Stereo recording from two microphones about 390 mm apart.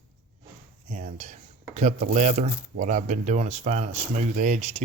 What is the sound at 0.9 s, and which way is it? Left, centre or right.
Speech, centre.